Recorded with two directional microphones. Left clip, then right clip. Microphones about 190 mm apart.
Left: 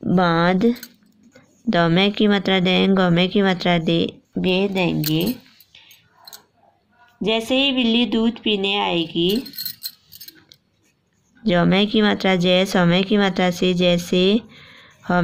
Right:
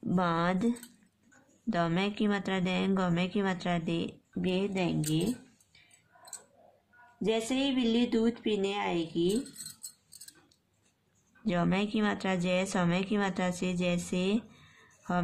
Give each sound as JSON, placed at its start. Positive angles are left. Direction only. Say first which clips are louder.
{"t": 0.0, "sound": "speech", "louder": "left 12 dB", "side_deg": 20}
{"t": 7.2, "sound": "speech", "louder": "left 11 dB", "side_deg": 35}
{"t": 11.4, "sound": "speech", "louder": "left 13 dB", "side_deg": 25}